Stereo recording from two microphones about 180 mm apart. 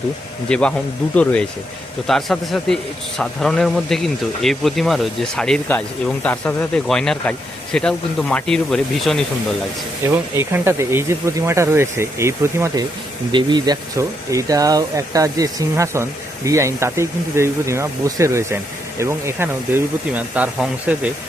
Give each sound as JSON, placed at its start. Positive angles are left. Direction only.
{"t": 0.4, "sound": "speech", "side_deg": 5}
{"t": 10.1, "sound": "speech", "side_deg": -15}